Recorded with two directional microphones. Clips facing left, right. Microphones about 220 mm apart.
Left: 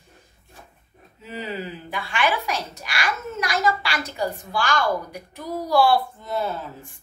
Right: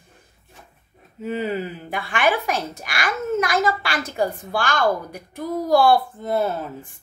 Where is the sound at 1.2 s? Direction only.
50° right (ahead or behind).